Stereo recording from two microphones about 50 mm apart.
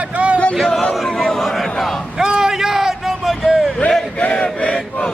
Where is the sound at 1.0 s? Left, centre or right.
Centre.